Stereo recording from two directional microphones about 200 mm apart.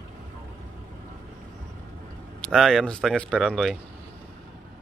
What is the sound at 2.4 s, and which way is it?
Speech, centre (ahead or behind).